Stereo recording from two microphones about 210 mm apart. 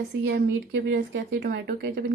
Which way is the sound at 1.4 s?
45° right (ahead or behind).